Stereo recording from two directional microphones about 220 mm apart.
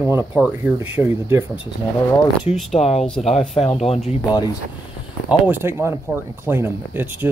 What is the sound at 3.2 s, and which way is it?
Speech, 30° left (ahead or behind).